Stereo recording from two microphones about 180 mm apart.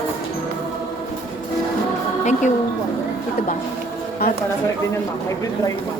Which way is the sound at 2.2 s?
40° left (ahead or behind).